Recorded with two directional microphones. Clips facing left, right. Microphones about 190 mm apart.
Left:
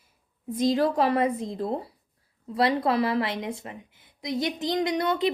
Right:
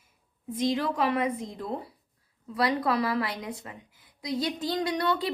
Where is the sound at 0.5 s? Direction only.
35° left (ahead or behind).